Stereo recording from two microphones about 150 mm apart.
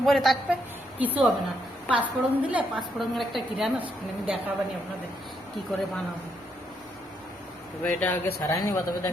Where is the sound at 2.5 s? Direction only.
10° right (ahead or behind).